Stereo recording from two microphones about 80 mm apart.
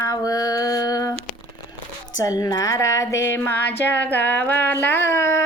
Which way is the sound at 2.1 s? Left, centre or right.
Left.